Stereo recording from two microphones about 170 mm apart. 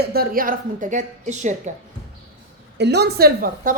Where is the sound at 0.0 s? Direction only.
65° right (ahead or behind); by 1.7 s 45° right (ahead or behind).